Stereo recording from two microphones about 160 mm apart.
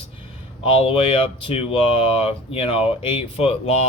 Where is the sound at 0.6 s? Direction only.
35° left (ahead or behind).